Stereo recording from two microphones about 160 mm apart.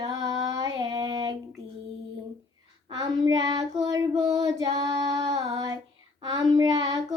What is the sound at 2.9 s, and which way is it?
Child singing, 25° right (ahead or behind).